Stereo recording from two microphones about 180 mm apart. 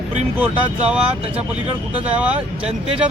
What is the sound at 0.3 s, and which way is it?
Speech, 10° right (ahead or behind).